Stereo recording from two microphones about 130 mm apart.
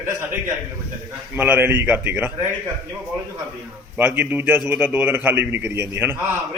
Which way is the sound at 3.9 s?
10° right (ahead or behind).